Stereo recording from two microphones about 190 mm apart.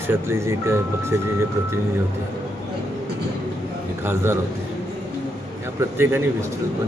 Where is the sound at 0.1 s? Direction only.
15° right (ahead or behind).